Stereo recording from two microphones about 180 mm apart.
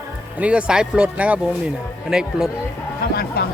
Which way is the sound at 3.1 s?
60° left (ahead or behind).